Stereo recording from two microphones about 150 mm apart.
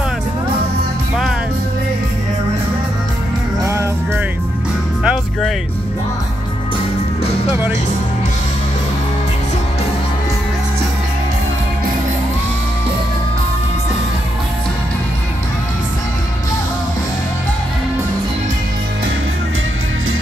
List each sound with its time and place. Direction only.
3.6 s music: 20° right (ahead or behind)
5.0 s music: 5° right (ahead or behind)